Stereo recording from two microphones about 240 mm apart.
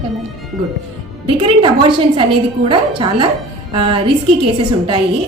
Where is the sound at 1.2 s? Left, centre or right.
Right.